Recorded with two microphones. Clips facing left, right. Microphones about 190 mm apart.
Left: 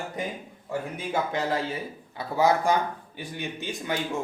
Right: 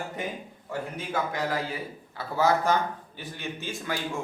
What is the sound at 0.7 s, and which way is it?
A man's voice, 25° left (ahead or behind).